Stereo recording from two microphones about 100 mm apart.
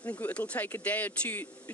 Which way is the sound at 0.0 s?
15° left (ahead or behind).